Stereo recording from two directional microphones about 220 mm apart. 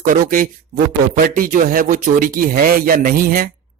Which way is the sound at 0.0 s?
40° right (ahead or behind).